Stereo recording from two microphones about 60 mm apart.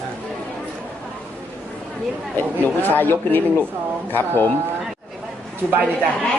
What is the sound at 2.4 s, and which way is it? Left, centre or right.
Speech, left.